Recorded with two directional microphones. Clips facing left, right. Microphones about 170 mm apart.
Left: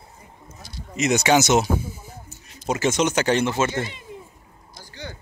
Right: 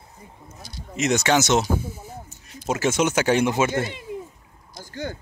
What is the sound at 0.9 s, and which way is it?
Speech, centre (ahead or behind).